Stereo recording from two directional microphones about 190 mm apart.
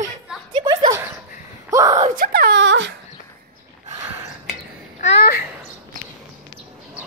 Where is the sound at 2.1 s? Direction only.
50° right (ahead or behind); by 2.9 s 75° right (ahead or behind).